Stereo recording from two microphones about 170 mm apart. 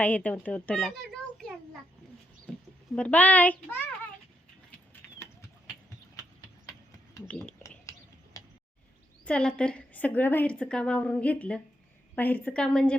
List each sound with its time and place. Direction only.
0.0 s a child's voice: 10° left (ahead or behind)
2.9 s a woman's voice: 10° left (ahead or behind)
7.3 s a woman's voice: 5° left (ahead or behind)
7.9 s a sound: 20° left (ahead or behind)
9.2 s a woman's voice: 5° left (ahead or behind)